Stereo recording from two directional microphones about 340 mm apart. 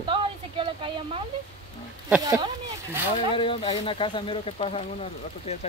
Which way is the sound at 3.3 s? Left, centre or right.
Centre.